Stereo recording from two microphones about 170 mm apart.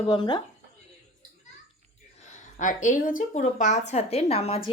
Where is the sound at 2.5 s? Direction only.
50° left (ahead or behind).